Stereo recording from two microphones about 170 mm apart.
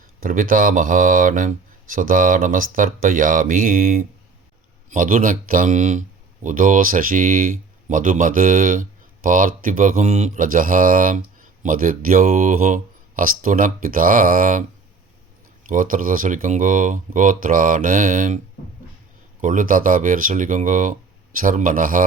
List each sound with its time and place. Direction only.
0.2 s speech: 55° right (ahead or behind)
15.6 s speech: 50° right (ahead or behind)
19.4 s speech: 50° right (ahead or behind)